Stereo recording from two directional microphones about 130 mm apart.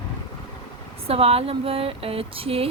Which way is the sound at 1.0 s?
50° right (ahead or behind).